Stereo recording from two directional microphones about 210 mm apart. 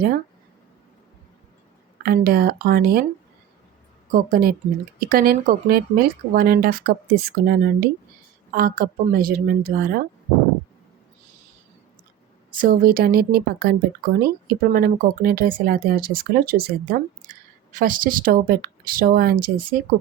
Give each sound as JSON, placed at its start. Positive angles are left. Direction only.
{"t": 2.0, "sound": "speech", "side_deg": -45}
{"t": 4.1, "sound": "speech", "side_deg": -45}
{"t": 12.5, "sound": "speech", "side_deg": -40}